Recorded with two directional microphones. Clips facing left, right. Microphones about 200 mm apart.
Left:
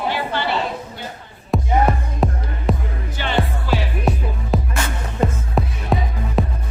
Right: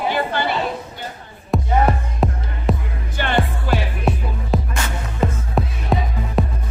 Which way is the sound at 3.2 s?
50° right (ahead or behind).